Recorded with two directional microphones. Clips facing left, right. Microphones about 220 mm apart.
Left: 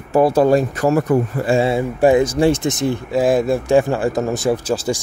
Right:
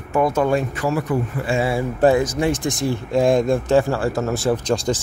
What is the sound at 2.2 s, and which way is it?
Speech, 30° left (ahead or behind).